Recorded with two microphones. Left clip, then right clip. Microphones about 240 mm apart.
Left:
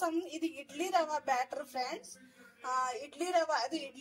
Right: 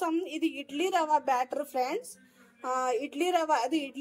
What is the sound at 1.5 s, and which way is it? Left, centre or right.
A woman's voice, right.